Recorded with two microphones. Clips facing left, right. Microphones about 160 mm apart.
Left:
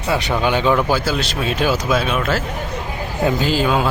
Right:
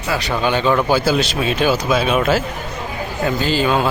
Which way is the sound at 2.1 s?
15° right (ahead or behind).